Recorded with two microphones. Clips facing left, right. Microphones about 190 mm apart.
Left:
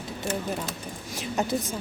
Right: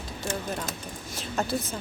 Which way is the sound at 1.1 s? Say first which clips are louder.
Left 2 dB; 15° left (ahead or behind).